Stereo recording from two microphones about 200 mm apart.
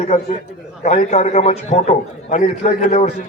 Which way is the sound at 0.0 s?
30° left (ahead or behind).